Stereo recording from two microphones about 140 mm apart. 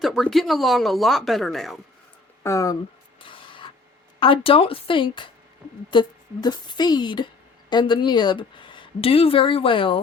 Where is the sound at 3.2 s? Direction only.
35° left (ahead or behind).